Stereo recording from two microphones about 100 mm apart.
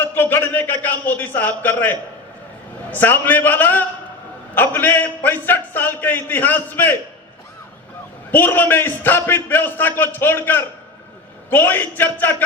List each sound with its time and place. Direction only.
0.0 s a man's voice: 20° left (ahead or behind)
8.3 s a man's voice: 20° left (ahead or behind)